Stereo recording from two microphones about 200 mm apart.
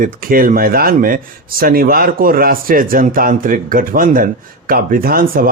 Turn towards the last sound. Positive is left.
turn(degrees=-45)  # may be behind; listen again after turning